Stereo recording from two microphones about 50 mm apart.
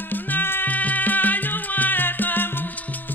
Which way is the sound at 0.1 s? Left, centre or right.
Left.